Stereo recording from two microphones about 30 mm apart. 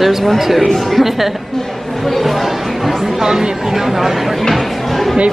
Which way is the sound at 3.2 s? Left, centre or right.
Right.